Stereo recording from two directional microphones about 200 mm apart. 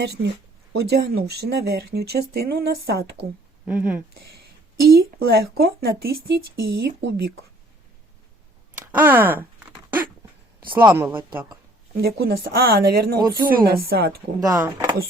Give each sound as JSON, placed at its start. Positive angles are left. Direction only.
{"t": 0.0, "sound": "speech", "side_deg": -55}
{"t": 3.7, "sound": "speech", "side_deg": -5}
{"t": 4.9, "sound": "speech", "side_deg": -50}
{"t": 8.8, "sound": "a sound", "side_deg": -10}
{"t": 10.8, "sound": "speech", "side_deg": -10}
{"t": 11.9, "sound": "speech", "side_deg": -50}
{"t": 13.1, "sound": "speech", "side_deg": -20}
{"t": 13.4, "sound": "speech", "side_deg": -45}
{"t": 14.3, "sound": "speech", "side_deg": -15}